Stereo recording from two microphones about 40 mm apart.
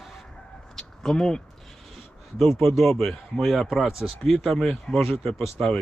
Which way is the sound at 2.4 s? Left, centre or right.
Centre.